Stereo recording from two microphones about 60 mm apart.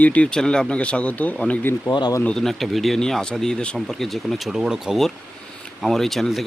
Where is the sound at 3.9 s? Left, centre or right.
Centre.